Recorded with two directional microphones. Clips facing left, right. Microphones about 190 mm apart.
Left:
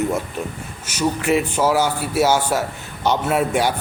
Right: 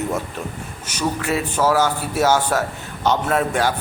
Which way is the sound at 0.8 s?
10° left (ahead or behind).